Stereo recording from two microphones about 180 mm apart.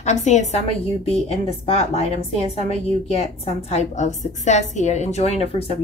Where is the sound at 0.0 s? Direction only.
40° left (ahead or behind).